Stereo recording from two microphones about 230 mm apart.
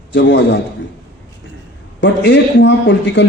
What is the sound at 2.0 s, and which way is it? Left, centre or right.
A man's voice, left.